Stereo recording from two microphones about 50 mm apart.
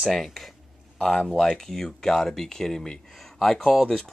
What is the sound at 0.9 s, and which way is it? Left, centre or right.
Speech, centre.